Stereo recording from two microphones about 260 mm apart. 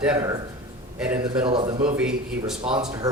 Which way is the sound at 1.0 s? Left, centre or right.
Centre.